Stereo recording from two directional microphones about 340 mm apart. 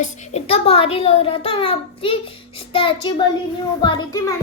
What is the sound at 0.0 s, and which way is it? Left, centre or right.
A child's voice, left.